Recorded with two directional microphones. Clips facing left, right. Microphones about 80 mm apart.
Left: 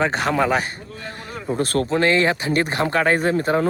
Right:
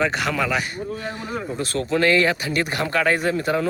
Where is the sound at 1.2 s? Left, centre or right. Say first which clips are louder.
Right 5 dB; centre.